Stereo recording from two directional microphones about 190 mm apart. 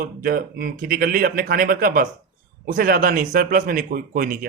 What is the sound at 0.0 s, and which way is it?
Speech, 50° right (ahead or behind).